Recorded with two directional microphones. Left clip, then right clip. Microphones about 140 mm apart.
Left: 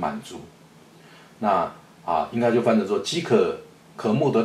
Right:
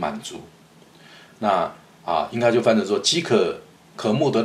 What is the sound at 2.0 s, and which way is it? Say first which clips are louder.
Speech: right 2 dB; 35° right (ahead or behind).